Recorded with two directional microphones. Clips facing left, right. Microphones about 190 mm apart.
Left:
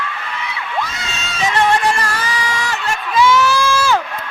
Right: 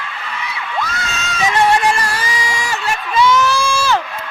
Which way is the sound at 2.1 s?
10° right (ahead or behind).